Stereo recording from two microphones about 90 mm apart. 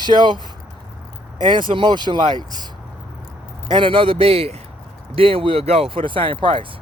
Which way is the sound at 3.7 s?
70° right (ahead or behind).